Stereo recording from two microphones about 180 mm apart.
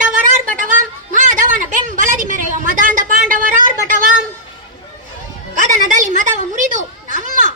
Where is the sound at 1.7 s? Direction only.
45° right (ahead or behind).